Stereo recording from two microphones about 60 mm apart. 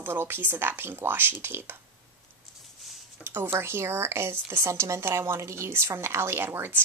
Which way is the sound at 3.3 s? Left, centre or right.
Right.